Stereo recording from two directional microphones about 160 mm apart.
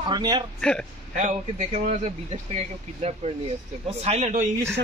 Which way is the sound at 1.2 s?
45° right (ahead or behind).